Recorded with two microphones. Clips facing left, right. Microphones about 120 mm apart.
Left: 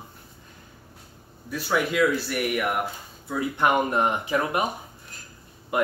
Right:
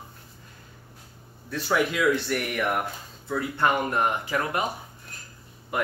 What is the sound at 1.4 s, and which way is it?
Speech, 5° left (ahead or behind).